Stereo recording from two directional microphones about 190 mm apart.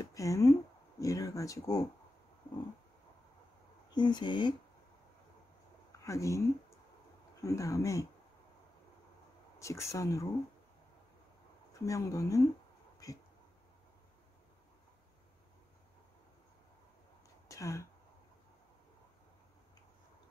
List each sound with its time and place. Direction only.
0.0 s speech: 15° left (ahead or behind)
3.9 s speech: 25° left (ahead or behind)
6.0 s speech: 15° left (ahead or behind)
9.6 s speech: 15° left (ahead or behind)
11.8 s speech: 15° left (ahead or behind)
17.5 s speech: 15° left (ahead or behind)